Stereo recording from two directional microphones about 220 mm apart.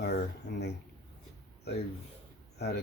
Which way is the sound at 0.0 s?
50° left (ahead or behind).